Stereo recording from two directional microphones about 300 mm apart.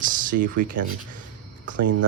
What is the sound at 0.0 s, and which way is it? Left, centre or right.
Speech, right.